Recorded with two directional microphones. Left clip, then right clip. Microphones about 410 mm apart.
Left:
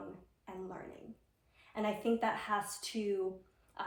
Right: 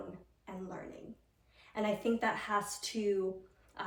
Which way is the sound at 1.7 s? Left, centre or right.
Centre.